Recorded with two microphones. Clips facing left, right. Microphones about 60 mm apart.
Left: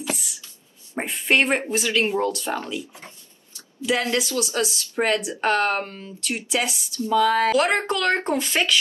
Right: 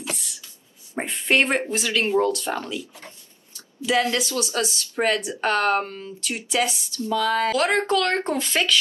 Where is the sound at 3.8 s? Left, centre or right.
Centre.